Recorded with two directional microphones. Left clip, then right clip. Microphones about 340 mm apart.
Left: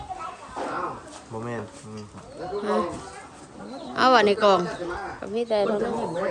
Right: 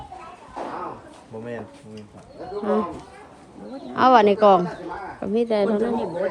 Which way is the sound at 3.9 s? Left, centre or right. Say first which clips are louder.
Right 3 dB; centre.